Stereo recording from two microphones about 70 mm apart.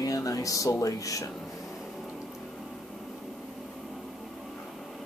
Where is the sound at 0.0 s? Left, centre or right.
Left.